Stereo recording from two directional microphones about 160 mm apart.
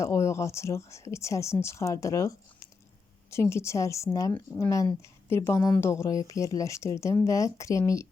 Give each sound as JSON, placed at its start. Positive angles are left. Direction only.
{"t": 0.0, "sound": "speech", "side_deg": 20}